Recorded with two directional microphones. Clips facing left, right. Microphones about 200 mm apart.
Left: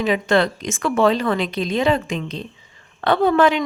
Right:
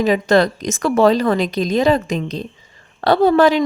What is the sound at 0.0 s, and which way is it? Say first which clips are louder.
A woman's voice: right 4 dB; 40° right (ahead or behind).